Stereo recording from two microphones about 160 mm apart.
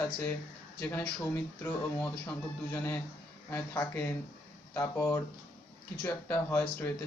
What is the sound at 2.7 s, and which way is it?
Speech, 15° left (ahead or behind).